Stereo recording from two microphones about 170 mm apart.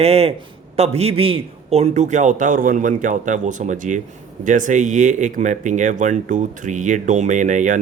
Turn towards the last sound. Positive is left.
turn(degrees=-50)  # may be behind; listen again after turning